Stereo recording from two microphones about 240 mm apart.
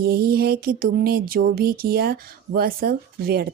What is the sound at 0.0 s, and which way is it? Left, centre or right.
Speech, right.